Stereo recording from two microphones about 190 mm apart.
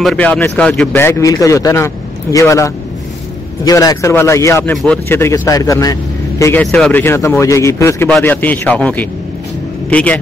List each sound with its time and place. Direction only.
0.0 s speech: 5° left (ahead or behind)
6.6 s a man's voice: 5° left (ahead or behind)